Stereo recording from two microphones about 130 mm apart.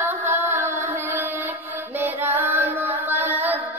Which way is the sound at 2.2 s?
15° right (ahead or behind).